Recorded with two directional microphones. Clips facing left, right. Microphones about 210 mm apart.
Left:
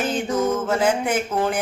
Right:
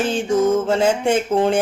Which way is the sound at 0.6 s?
25° right (ahead or behind).